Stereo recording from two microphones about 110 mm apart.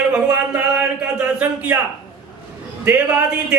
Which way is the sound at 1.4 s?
15° right (ahead or behind).